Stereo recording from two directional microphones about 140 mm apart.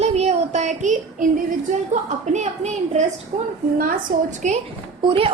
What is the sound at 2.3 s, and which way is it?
Speech, 55° right (ahead or behind).